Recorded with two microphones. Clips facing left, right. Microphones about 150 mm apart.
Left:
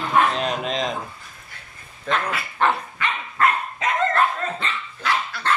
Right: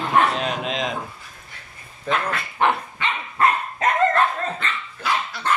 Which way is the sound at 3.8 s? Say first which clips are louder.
Right 3 dB; 50° right (ahead or behind).